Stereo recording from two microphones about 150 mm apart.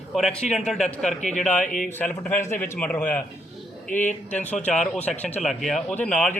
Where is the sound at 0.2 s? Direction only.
Centre (ahead or behind).